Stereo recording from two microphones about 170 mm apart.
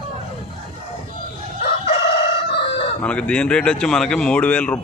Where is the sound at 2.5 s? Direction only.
75° left (ahead or behind).